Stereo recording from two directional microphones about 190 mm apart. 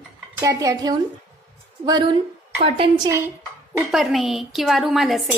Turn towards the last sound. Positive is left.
turn(degrees=0)  # may be behind; listen again after turning